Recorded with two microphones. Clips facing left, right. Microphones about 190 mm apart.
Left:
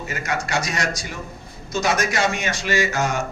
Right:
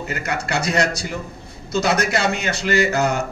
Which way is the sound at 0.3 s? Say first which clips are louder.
Right 2 dB; 60° right (ahead or behind).